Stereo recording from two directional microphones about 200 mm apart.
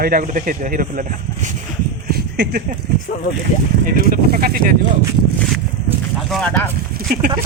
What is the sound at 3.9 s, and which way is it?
Speech, 45° right (ahead or behind).